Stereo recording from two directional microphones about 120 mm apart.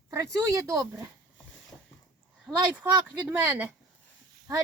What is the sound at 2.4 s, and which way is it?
Speech, 10° right (ahead or behind).